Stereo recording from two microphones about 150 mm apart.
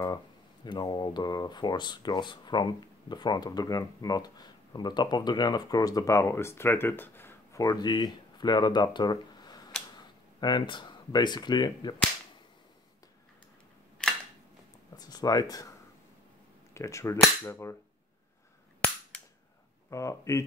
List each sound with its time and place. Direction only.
0.7 s speech: 30° left (ahead or behind)
15.0 s speech: 25° left (ahead or behind)
16.7 s speech: 20° left (ahead or behind)
19.9 s speech: 20° left (ahead or behind)